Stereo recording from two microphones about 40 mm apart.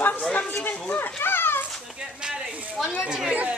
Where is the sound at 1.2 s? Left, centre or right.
Left.